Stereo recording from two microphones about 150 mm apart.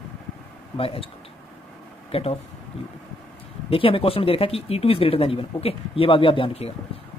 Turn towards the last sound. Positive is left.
turn(degrees=40)  # may be behind; listen again after turning